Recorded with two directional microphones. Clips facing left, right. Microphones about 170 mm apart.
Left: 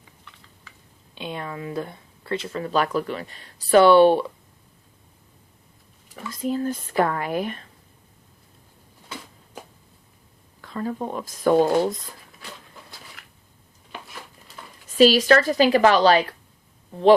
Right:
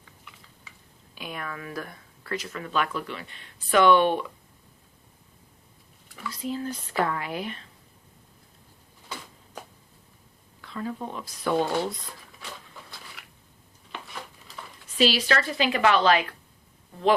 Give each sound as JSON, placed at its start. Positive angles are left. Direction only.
{"t": 1.1, "sound": "speech", "side_deg": 25}
{"t": 6.1, "sound": "speech", "side_deg": 50}
{"t": 10.6, "sound": "speech", "side_deg": 45}
{"t": 13.2, "sound": "a sound", "side_deg": 0}
{"t": 14.9, "sound": "speech", "side_deg": 45}